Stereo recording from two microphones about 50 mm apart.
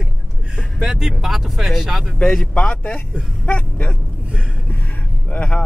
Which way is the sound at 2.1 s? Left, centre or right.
Centre.